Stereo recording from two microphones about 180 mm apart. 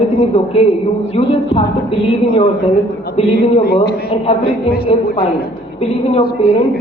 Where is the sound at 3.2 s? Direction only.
35° left (ahead or behind).